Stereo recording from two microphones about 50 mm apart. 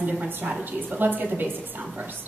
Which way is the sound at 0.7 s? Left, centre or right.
Right.